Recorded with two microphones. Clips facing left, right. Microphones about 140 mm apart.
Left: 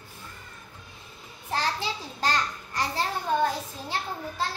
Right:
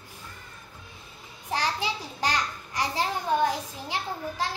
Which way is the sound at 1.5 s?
15° right (ahead or behind).